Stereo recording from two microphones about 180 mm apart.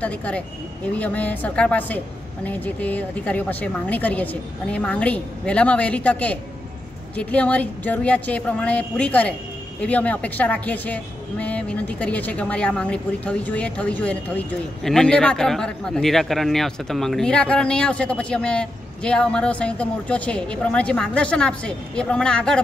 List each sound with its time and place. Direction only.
0.0 s a woman's voice: 10° left (ahead or behind)